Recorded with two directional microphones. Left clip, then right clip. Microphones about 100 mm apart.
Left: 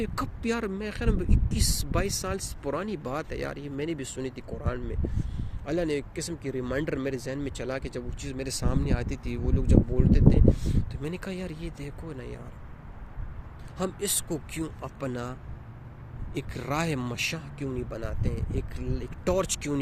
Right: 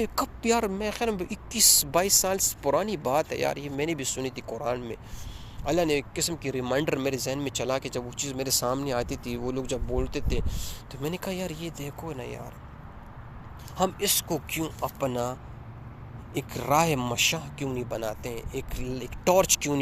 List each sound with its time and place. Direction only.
0.0 s speech: 60° left (ahead or behind); by 9.8 s 90° left
10.0 s speech: 65° left (ahead or behind); by 12.4 s 45° left (ahead or behind)
13.7 s speech: 50° left (ahead or behind)